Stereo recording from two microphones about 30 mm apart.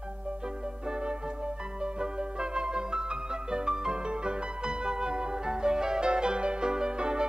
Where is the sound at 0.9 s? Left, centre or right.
Right.